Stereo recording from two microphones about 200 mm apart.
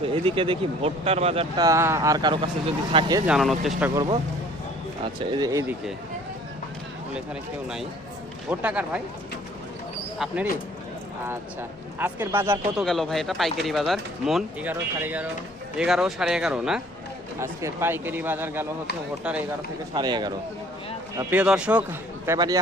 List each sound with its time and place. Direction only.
0.0 s speech: 25° right (ahead or behind)
1.6 s speech: 15° right (ahead or behind)
3.2 s speech: centre (ahead or behind)
5.0 s speech: 20° right (ahead or behind)
8.4 s speech: 5° right (ahead or behind)
11.9 s speech: 10° right (ahead or behind)
12.7 s speech: centre (ahead or behind)
19.9 s speech: 20° right (ahead or behind)
21.2 s speech: 10° right (ahead or behind)
22.3 s speech: 20° right (ahead or behind)